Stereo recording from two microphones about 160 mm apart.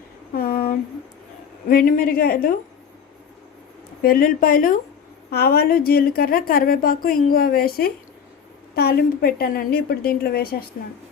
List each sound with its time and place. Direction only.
0.3 s a sound: 70° left (ahead or behind)
1.6 s a woman's voice: 65° left (ahead or behind)
4.0 s a woman's voice: 65° left (ahead or behind)
5.3 s a woman's voice: 75° left (ahead or behind)